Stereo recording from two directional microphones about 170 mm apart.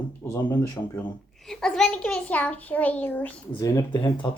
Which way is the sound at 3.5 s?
20° left (ahead or behind).